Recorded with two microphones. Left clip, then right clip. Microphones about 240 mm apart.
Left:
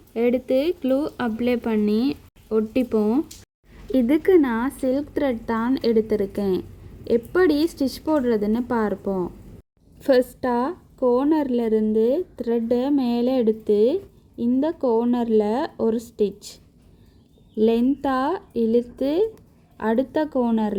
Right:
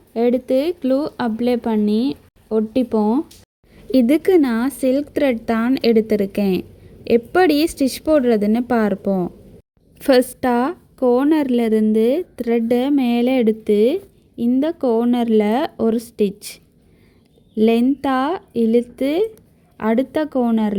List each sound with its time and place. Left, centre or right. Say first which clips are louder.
0.1 s speech: right 3 dB; centre
3.9 s a woman's voice: right 3 dB; right
17.5 s a woman's voice: right 3 dB; right